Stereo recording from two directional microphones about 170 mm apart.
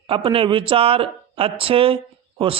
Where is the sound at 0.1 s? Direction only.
30° right (ahead or behind).